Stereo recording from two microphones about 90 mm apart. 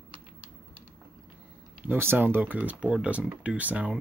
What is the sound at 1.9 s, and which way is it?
Speech, 25° right (ahead or behind).